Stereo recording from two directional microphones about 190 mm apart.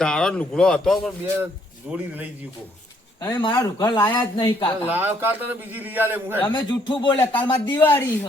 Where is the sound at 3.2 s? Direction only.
25° left (ahead or behind).